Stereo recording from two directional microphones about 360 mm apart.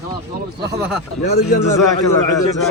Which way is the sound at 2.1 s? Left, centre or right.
Left.